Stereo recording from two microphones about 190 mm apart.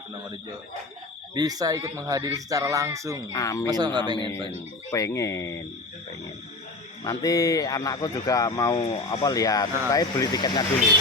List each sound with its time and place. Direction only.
1.4 s speech: 20° right (ahead or behind)
3.3 s speech: 15° left (ahead or behind)
3.7 s speech: 20° right (ahead or behind)
4.9 s speech: 15° left (ahead or behind)
7.0 s speech: 20° left (ahead or behind)